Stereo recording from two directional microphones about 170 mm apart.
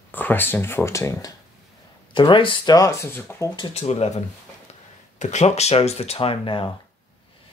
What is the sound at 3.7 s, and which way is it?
Speech, 40° left (ahead or behind).